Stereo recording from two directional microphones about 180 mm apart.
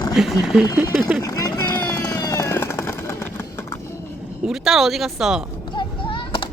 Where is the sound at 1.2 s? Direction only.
20° left (ahead or behind).